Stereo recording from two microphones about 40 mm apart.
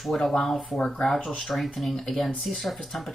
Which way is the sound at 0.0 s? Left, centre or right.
Centre.